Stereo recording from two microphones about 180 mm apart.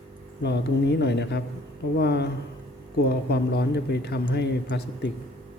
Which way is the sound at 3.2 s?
65° left (ahead or behind).